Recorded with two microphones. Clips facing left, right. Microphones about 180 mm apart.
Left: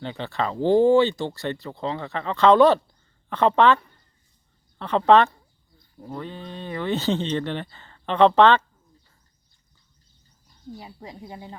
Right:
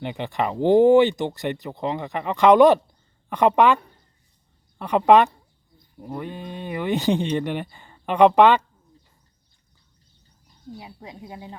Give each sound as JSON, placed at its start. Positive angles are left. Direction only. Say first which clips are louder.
{"t": 0.0, "sound": "speech", "louder": "right 2 dB", "side_deg": -15}
{"t": 4.8, "sound": "speech", "louder": "right 1 dB", "side_deg": -15}
{"t": 10.8, "sound": "speech", "louder": "right 1 dB", "side_deg": -5}